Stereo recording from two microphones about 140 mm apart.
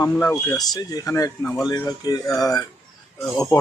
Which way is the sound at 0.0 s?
20° left (ahead or behind).